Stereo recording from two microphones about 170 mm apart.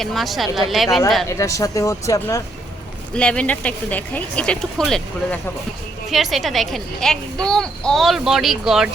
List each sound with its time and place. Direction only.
0.0 s speech: centre (ahead or behind)
1.3 s speech: 15° left (ahead or behind)
3.2 s speech: 5° left (ahead or behind)